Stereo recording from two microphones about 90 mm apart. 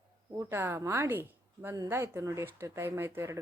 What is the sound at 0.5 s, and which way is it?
Speech, 30° right (ahead or behind).